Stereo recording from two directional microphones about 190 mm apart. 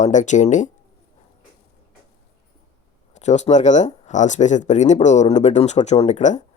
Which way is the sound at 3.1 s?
40° left (ahead or behind).